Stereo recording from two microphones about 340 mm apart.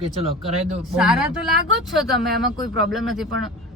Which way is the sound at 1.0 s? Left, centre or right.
Centre.